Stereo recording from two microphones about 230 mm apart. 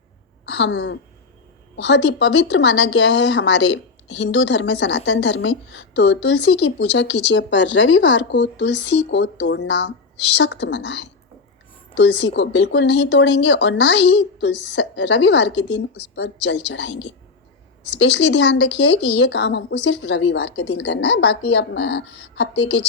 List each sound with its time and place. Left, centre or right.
0.5 s speech: left